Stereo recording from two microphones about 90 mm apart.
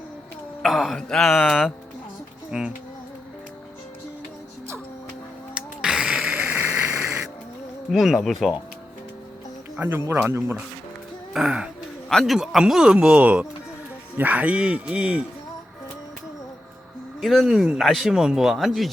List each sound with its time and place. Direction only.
0.6 s speech: centre (ahead or behind)
2.5 s music: 10° right (ahead or behind)
5.5 s a sound: 10° right (ahead or behind)
7.9 s speech: centre (ahead or behind)
9.7 s speech: 25° right (ahead or behind)
11.3 s speech: 10° right (ahead or behind)
17.2 s speech: centre (ahead or behind)